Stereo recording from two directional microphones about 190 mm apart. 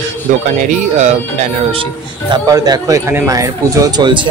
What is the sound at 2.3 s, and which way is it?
Speech, 20° right (ahead or behind).